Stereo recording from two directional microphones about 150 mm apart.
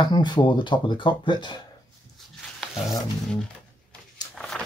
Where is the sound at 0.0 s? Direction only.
30° left (ahead or behind).